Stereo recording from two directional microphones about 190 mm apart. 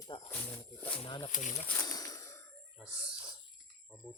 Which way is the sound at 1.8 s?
20° left (ahead or behind).